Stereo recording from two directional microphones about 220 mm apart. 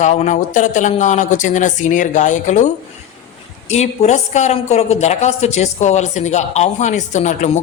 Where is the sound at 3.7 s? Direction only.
30° left (ahead or behind).